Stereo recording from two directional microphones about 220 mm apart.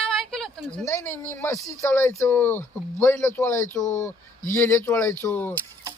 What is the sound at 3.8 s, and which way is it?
Speech, 35° left (ahead or behind).